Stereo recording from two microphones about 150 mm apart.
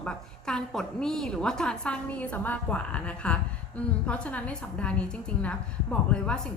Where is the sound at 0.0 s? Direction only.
5° left (ahead or behind).